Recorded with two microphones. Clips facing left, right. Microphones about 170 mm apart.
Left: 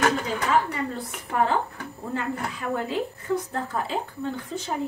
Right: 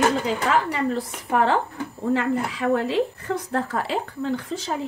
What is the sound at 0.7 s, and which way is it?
A woman's voice, 90° right.